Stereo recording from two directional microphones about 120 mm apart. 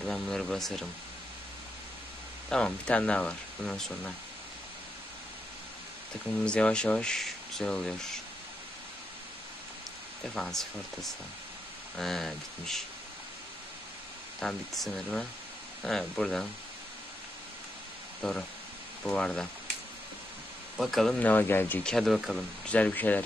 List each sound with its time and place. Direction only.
0.0 s speech: 5° left (ahead or behind)
2.5 s speech: 10° left (ahead or behind)
6.4 s speech: 10° left (ahead or behind)
10.3 s speech: 5° left (ahead or behind)
14.4 s speech: centre (ahead or behind)
18.2 s speech: 5° left (ahead or behind)
20.7 s speech: centre (ahead or behind)
21.3 s speech: 15° left (ahead or behind)
21.9 s speech: centre (ahead or behind)
22.7 s speech: 10° left (ahead or behind)